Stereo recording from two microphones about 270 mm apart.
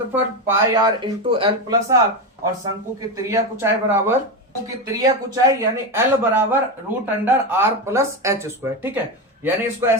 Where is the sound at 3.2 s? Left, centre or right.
Centre.